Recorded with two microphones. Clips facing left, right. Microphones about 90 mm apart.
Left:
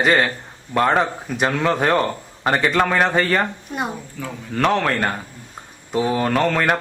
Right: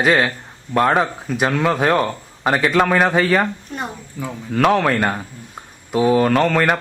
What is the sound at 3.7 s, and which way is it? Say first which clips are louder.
Speech: left 2 dB; 10° left (ahead or behind).